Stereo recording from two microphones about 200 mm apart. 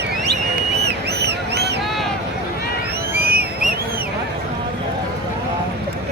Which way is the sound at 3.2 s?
50° right (ahead or behind).